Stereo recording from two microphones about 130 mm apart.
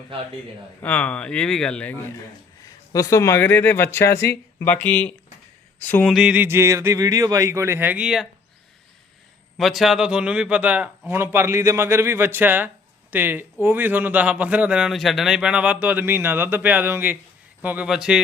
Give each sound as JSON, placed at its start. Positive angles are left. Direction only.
{"t": 0.8, "sound": "speech", "side_deg": 10}
{"t": 2.6, "sound": "speech", "side_deg": 25}
{"t": 6.1, "sound": "speech", "side_deg": -10}
{"t": 9.6, "sound": "a man's voice", "side_deg": 0}